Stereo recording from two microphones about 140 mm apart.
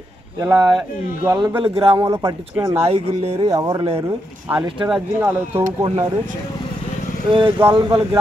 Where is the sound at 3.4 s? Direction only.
25° right (ahead or behind).